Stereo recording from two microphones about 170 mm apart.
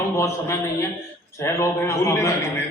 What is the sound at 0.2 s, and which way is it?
A man's voice, 15° left (ahead or behind).